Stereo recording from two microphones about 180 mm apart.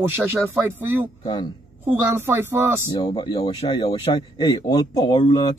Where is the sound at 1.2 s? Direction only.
25° left (ahead or behind).